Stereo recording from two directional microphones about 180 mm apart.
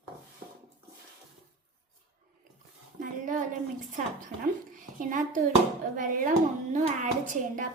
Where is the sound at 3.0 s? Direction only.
50° right (ahead or behind).